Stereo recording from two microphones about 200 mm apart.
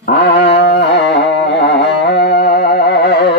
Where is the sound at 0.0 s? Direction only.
55° left (ahead or behind).